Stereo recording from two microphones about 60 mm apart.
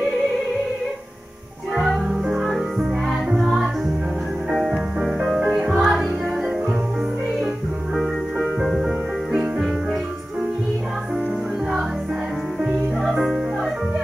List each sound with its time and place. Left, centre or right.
1.8 s music: centre
7.9 s music: centre
13.0 s music: centre